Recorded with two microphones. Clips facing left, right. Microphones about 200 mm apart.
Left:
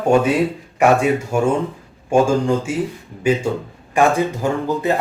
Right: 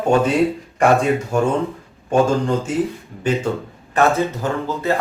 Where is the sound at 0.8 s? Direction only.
10° left (ahead or behind).